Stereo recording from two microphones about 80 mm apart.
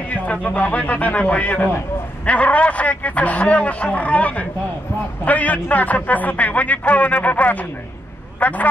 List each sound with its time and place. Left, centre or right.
0.1 s a man's voice: centre